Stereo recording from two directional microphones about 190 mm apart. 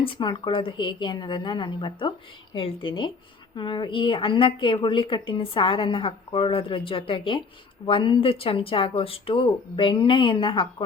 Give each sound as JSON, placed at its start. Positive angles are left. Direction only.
{"t": 0.0, "sound": "a woman's voice", "side_deg": 25}